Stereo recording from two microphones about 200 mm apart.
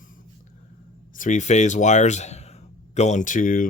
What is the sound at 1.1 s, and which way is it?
Speech, 40° left (ahead or behind).